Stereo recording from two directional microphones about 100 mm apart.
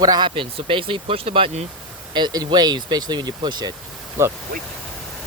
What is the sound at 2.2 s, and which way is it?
Speech, 45° right (ahead or behind).